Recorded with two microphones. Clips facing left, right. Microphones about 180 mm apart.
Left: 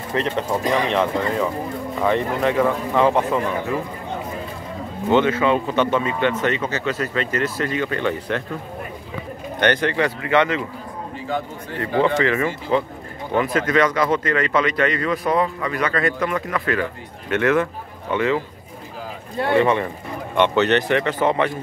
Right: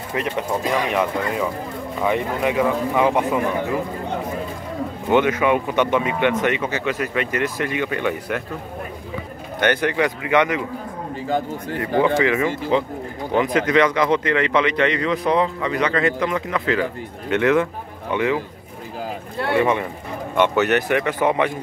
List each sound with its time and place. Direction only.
0.1 s speech: 10° right (ahead or behind)
5.1 s speech: 15° right (ahead or behind)
9.6 s speech: 10° right (ahead or behind)
12.2 s speech: 15° right (ahead or behind)
19.5 s speech: 10° right (ahead or behind)